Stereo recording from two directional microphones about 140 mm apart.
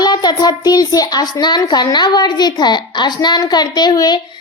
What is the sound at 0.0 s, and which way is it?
A child's voice, 30° left (ahead or behind).